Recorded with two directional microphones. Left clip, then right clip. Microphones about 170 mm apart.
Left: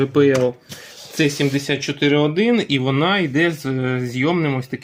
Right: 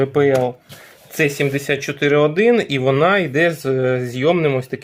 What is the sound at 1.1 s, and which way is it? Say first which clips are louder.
Speech: right 1 dB; 25° right (ahead or behind).